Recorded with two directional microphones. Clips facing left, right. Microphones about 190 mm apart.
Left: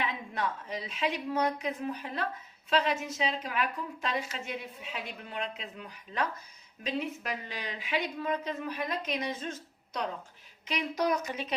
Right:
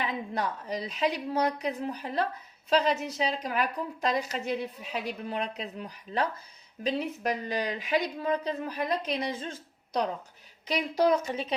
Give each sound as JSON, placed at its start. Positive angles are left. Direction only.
{"t": 0.0, "sound": "a woman's voice", "side_deg": -40}